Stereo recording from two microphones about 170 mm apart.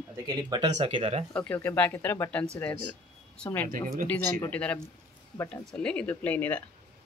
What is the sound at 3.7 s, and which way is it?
Speech, 55° right (ahead or behind).